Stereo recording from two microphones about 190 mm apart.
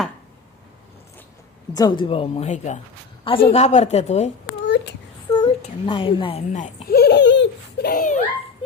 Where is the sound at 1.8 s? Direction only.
25° left (ahead or behind).